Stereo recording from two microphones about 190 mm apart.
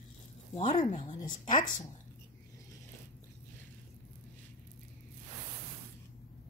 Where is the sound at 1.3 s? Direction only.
45° left (ahead or behind).